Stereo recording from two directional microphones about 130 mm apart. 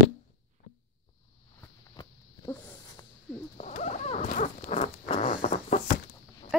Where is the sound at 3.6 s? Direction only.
65° left (ahead or behind).